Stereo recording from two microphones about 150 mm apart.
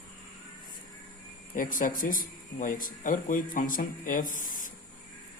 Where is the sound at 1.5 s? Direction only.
65° left (ahead or behind).